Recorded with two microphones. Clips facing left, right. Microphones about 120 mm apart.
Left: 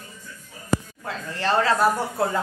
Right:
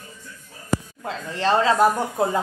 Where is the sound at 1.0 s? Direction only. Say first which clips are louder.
Right 3 dB; 20° right (ahead or behind).